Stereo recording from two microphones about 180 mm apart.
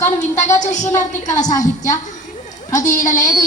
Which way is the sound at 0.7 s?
45° left (ahead or behind).